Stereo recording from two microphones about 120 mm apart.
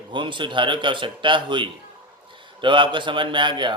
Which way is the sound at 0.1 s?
40° right (ahead or behind).